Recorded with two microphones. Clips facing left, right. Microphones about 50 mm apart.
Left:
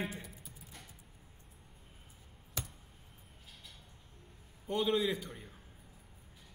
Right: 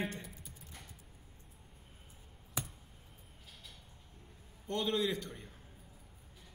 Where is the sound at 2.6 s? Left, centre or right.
Centre.